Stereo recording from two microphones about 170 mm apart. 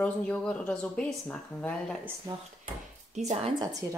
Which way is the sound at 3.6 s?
20° right (ahead or behind).